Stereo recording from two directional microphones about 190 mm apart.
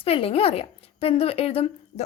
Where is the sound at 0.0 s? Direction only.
30° left (ahead or behind).